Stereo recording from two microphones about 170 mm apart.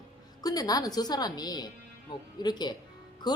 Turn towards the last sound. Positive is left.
turn(degrees=25)  # may be behind; listen again after turning